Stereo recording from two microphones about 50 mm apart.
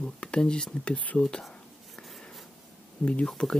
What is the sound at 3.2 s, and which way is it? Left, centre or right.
Speech, centre.